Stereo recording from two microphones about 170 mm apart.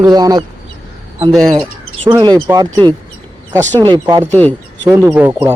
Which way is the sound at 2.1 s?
25° right (ahead or behind).